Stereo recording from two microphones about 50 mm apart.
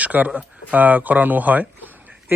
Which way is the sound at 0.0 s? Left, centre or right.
Right.